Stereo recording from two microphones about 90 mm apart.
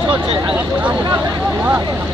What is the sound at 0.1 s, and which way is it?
Speech, 15° right (ahead or behind).